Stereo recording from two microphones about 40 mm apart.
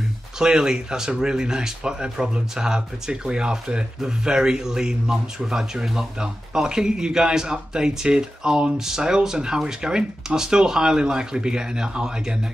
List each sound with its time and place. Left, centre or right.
0.4 s a man's voice: centre